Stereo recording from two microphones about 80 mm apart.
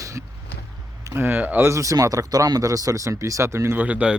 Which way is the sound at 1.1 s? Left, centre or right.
Right.